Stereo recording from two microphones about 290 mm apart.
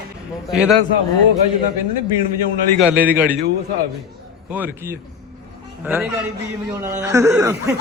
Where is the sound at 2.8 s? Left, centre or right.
Centre.